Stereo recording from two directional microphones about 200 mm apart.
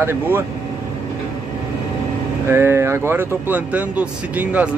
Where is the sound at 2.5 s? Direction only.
10° right (ahead or behind).